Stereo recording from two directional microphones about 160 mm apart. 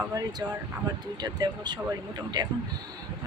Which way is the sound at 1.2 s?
25° right (ahead or behind).